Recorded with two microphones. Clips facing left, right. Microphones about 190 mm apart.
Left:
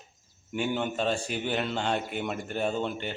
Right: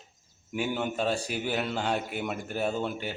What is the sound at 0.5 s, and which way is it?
A man's voice, 5° right (ahead or behind).